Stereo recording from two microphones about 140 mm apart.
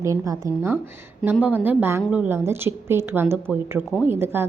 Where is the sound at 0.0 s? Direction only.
20° right (ahead or behind).